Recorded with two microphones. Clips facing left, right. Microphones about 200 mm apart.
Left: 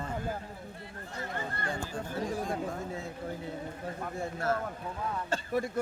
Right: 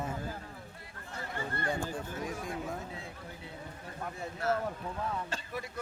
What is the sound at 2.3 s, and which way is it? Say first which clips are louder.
Speech: left 5 dB; 40° left (ahead or behind).